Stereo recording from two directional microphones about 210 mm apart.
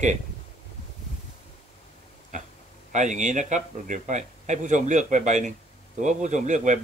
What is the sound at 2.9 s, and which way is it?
A man's voice, 35° right (ahead or behind).